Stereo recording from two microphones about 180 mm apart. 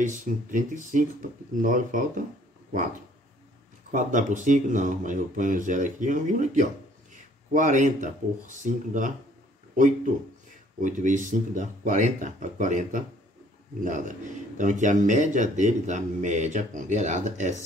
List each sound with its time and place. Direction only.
0.0 s speech: 45° right (ahead or behind)
3.9 s speech: 45° right (ahead or behind)
10.8 s speech: 45° right (ahead or behind)